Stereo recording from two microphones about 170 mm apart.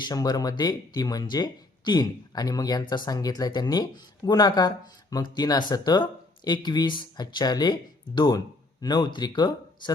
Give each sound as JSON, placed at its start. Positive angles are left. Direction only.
{"t": 0.0, "sound": "speech", "side_deg": 25}